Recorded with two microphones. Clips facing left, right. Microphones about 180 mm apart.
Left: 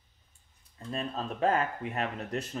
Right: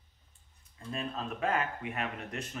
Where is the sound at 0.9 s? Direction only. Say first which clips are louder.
Left 2 dB; 35° left (ahead or behind).